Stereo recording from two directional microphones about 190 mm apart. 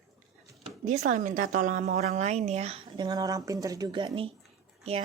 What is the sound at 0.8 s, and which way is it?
A woman's voice, 40° right (ahead or behind).